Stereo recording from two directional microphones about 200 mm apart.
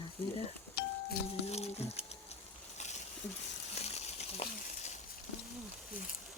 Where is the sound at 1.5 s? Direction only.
30° left (ahead or behind).